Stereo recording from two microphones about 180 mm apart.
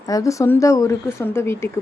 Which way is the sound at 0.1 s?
20° left (ahead or behind).